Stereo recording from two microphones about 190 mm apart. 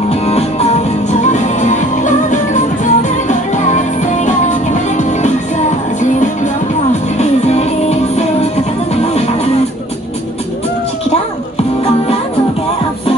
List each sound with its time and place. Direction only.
0.1 s music: 35° left (ahead or behind)